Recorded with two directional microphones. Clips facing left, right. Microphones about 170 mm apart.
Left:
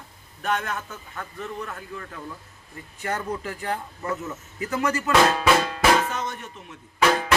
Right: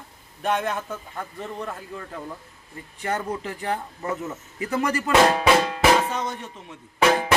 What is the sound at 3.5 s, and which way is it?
A man's voice, 25° right (ahead or behind).